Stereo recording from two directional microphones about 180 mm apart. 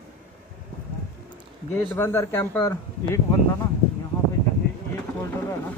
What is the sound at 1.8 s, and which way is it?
A man's voice, 10° left (ahead or behind).